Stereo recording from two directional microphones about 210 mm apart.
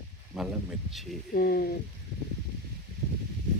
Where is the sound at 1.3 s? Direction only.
45° left (ahead or behind).